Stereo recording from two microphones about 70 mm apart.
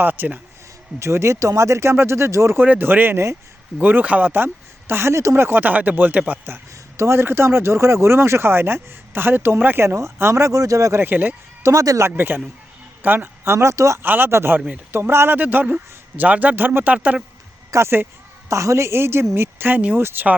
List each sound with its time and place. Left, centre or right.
0.0 s a man's voice: right
0.9 s speech: right
2.6 s a man's voice: right
6.9 s a man's voice: right
9.8 s speech: right
10.5 s speech: right
11.0 s a man's voice: right
11.6 s speech: right
12.0 s speech: right
14.0 s a man's voice: right
17.7 s speech: right
18.4 s speech: right